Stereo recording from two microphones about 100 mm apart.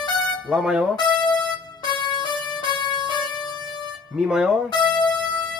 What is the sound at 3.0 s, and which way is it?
Music, 55° right (ahead or behind).